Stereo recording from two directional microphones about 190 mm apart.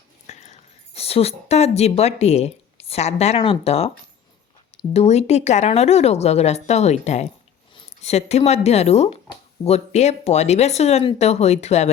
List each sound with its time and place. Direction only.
0.3 s a woman's voice: 35° left (ahead or behind)